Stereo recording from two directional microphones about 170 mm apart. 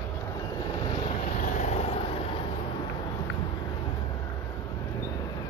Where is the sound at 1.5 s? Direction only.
40° left (ahead or behind).